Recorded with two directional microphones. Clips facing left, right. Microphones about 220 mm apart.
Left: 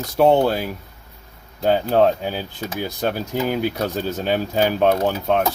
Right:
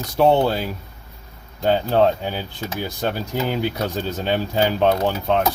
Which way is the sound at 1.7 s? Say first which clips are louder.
Left 1 dB; 55° left (ahead or behind).